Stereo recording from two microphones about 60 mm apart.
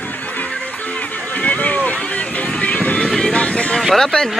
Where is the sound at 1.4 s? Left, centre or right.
Left.